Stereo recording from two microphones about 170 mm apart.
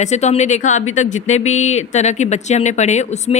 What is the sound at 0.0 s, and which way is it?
A woman's voice, 40° left (ahead or behind).